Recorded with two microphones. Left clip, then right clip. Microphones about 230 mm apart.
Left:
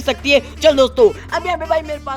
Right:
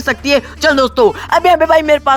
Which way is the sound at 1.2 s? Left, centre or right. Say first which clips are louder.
Right 10 dB; right.